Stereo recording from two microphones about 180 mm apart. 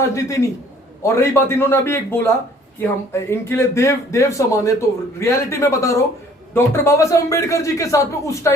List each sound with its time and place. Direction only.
0.0 s a man's voice: 15° left (ahead or behind)